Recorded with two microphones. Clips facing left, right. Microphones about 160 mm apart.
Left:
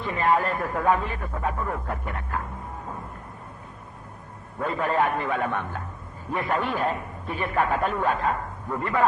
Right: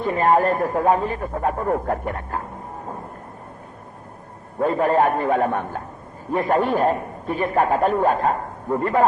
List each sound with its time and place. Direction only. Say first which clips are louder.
0.0 s a man's voice: right 6 dB; 45° right (ahead or behind)
4.6 s a man's voice: right 6 dB; 45° right (ahead or behind)